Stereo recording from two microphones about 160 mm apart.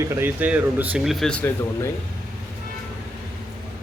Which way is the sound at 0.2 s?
10° right (ahead or behind).